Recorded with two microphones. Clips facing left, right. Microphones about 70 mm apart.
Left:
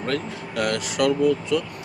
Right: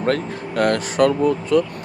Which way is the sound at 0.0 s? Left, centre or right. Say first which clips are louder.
Right 6 dB; right.